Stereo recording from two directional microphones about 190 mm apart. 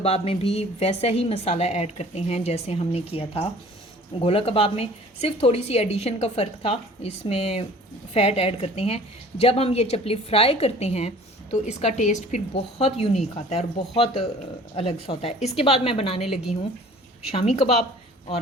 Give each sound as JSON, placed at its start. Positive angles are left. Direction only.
{"t": 0.0, "sound": "a woman's voice", "side_deg": 30}
{"t": 17.3, "sound": "a woman's voice", "side_deg": 35}